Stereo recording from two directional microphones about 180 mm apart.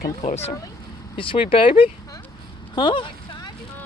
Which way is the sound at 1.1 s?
30° left (ahead or behind).